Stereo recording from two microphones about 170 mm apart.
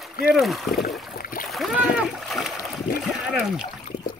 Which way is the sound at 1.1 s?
55° left (ahead or behind).